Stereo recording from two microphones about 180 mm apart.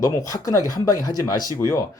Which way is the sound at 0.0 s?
20° left (ahead or behind).